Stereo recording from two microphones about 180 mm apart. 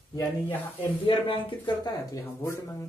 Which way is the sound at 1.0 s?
30° left (ahead or behind).